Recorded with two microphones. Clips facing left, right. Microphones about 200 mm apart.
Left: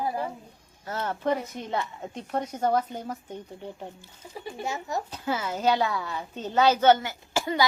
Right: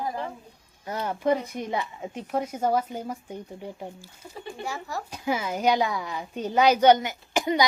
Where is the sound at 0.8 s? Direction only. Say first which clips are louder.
Right 2 dB; 15° right (ahead or behind).